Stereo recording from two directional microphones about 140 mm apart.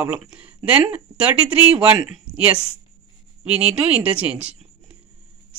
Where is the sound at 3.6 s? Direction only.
10° right (ahead or behind).